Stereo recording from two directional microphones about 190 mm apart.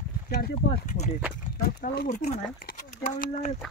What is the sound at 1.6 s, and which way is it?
Speech, 50° left (ahead or behind).